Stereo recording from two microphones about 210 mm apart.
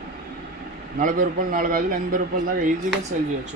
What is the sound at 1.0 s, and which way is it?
A man's voice, 40° right (ahead or behind).